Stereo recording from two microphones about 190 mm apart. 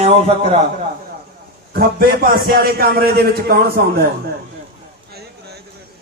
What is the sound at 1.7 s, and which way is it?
A man's voice, 50° right (ahead or behind).